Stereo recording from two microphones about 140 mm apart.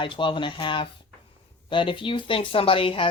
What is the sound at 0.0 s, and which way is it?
Speech, 35° left (ahead or behind).